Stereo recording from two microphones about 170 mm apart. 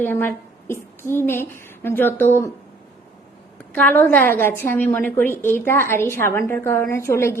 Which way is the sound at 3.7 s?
10° left (ahead or behind).